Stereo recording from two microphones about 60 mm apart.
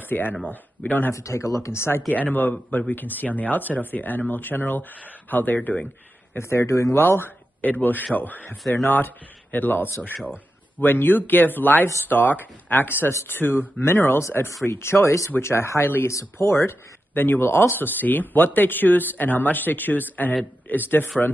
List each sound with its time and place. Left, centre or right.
0.0 s speech: left
1.1 s speech: left
2.0 s speech: left
6.3 s speech: left
16.1 s a man's voice: left